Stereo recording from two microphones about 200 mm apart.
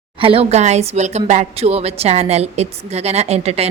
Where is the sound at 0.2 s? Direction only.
30° right (ahead or behind).